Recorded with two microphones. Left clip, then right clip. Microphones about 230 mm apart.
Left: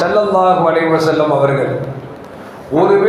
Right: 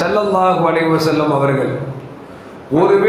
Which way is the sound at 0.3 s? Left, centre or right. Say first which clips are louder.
Left 2 dB; right.